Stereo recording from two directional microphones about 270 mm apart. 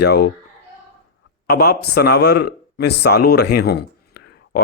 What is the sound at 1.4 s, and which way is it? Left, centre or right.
Speech, left.